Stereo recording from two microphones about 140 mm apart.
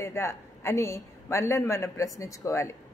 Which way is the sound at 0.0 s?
20° left (ahead or behind).